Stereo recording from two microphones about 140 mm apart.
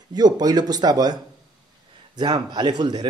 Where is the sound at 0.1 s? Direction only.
30° right (ahead or behind).